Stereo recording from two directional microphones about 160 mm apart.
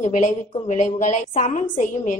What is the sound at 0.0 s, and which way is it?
A woman's voice, 50° left (ahead or behind).